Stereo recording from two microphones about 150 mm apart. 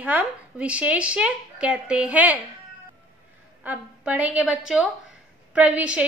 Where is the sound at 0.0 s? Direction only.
10° right (ahead or behind).